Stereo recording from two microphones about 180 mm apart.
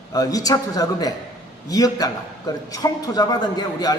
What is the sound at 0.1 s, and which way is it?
A man's voice, 20° left (ahead or behind).